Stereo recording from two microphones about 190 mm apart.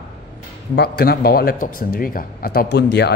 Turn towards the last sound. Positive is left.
turn(degrees=60)  # may be behind; listen again after turning